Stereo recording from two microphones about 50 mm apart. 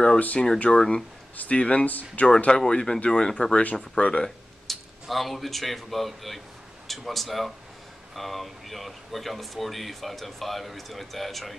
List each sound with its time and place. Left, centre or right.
0.2 s speech: left
0.7 s speech: centre
1.3 s speech: left
1.6 s speech: left
1.9 s speech: left
2.2 s speech: centre
4.6 s speech: centre